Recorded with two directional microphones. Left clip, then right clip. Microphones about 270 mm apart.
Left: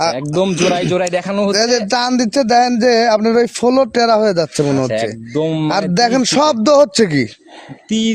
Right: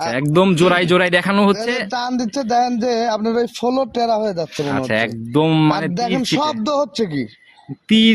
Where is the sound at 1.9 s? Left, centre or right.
Left.